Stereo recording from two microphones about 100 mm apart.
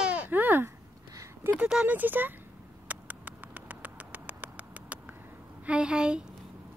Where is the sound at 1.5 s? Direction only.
10° right (ahead or behind).